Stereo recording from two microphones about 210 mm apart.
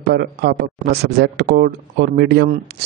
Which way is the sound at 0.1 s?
50° right (ahead or behind).